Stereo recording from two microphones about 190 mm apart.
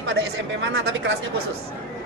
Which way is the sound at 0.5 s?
70° right (ahead or behind).